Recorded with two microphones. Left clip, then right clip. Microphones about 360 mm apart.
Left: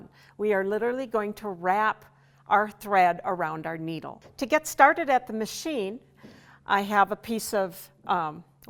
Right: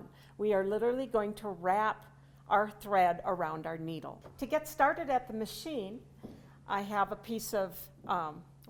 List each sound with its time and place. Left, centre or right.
0.3 s a woman's voice: left